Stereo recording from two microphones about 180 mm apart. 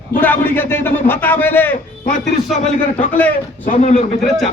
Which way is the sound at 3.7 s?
40° left (ahead or behind).